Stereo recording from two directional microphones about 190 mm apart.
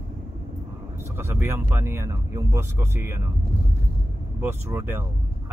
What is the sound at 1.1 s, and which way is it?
Speech, 10° right (ahead or behind).